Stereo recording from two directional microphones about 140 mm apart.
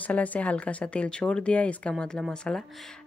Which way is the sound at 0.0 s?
10° left (ahead or behind).